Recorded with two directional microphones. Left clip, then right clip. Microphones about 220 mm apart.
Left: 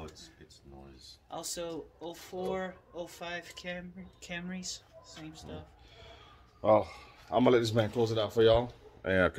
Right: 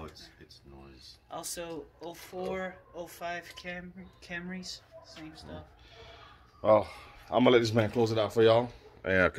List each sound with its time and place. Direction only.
1.5 s speech: 50° left (ahead or behind)
3.7 s speech: 60° left (ahead or behind)
4.2 s speech: 85° left
6.6 s speech: centre (ahead or behind)
7.2 s speech: 15° right (ahead or behind)
9.0 s speech: 5° left (ahead or behind)